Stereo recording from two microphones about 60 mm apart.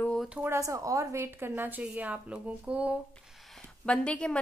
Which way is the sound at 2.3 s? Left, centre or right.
Centre.